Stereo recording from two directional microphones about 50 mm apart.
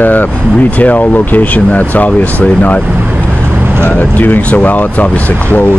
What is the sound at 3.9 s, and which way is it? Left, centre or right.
Speech, left.